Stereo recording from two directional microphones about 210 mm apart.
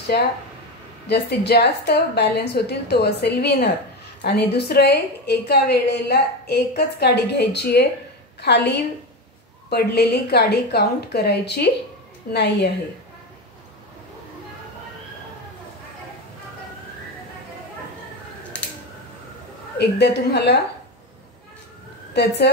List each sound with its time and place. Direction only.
1.0 s a woman's voice: 50° left (ahead or behind)
20.0 s a woman's voice: 55° left (ahead or behind)
22.1 s speech: 55° left (ahead or behind)